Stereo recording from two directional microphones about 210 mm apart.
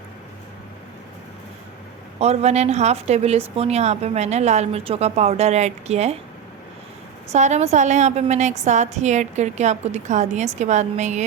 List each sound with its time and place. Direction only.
2.1 s a woman's voice: 30° right (ahead or behind)
7.3 s a woman's voice: 35° right (ahead or behind)